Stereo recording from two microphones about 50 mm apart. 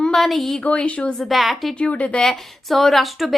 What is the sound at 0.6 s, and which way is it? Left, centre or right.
Speech, left.